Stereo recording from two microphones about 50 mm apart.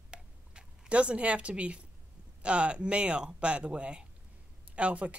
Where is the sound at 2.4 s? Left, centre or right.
Right.